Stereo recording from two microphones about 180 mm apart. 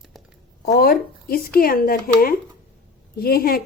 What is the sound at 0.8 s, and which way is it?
Speech, 55° left (ahead or behind).